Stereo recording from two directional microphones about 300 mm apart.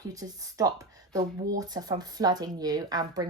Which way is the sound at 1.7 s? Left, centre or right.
Centre.